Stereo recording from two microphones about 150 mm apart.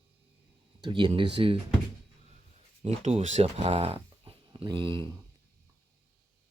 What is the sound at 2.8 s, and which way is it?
Speech, 45° right (ahead or behind).